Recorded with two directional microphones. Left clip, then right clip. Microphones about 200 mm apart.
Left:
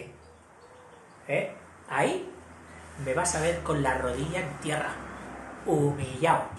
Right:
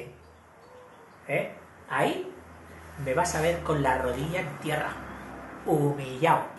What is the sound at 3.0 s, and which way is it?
Speech, 5° right (ahead or behind).